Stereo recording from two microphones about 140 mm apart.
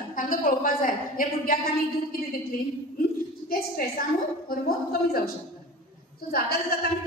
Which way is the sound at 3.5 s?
90° left.